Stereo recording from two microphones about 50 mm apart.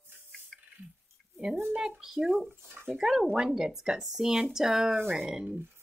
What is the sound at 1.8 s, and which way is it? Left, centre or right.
Speech, centre.